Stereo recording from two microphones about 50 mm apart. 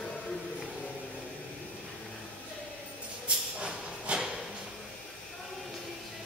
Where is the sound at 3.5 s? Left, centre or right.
Centre.